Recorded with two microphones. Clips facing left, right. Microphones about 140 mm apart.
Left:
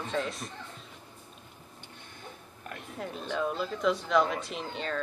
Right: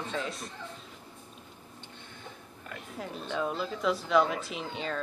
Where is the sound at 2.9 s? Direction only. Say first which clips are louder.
Left 1 dB; centre (ahead or behind).